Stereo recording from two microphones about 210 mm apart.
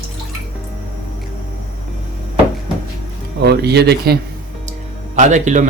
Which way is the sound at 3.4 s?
50° right (ahead or behind).